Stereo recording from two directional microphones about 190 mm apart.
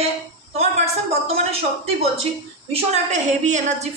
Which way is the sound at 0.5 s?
35° right (ahead or behind).